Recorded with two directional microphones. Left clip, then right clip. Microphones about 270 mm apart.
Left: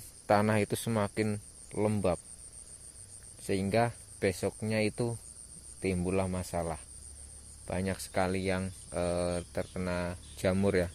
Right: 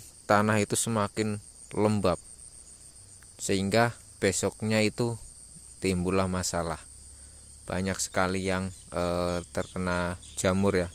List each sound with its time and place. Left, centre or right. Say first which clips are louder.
0.3 s speech: right 3 dB; centre
3.3 s speech: right 4 dB; centre